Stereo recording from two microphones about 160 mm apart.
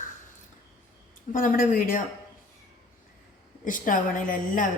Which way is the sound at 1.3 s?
60° left (ahead or behind).